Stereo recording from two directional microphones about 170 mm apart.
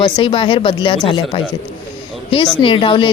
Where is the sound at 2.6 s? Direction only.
30° left (ahead or behind).